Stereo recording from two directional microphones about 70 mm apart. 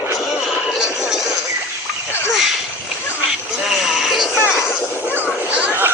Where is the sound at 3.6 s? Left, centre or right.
Centre.